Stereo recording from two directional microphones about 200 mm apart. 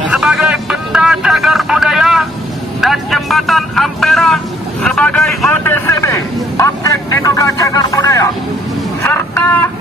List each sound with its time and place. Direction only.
0.1 s music: 5° right (ahead or behind)
2.8 s vehicle: centre (ahead or behind); by 8.3 s 15° left (ahead or behind)
9.0 s a sound: 10° left (ahead or behind)